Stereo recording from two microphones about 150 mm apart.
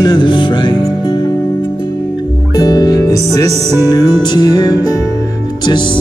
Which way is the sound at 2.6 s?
25° left (ahead or behind).